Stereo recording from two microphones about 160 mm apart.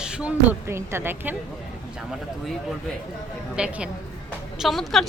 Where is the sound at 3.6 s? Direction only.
5° right (ahead or behind).